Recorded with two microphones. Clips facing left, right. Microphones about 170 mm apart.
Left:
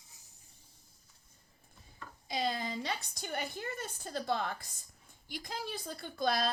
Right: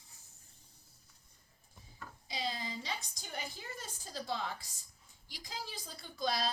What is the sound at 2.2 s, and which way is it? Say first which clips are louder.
A woman's voice: left 5 dB; 50° left (ahead or behind).